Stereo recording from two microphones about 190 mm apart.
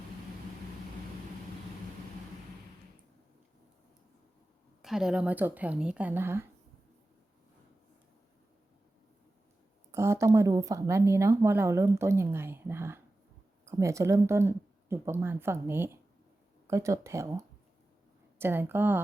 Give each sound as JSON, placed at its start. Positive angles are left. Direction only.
{"t": 4.8, "sound": "speech", "side_deg": 0}
{"t": 9.9, "sound": "speech", "side_deg": -15}